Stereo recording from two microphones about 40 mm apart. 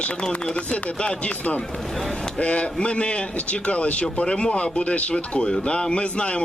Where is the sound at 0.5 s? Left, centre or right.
Left.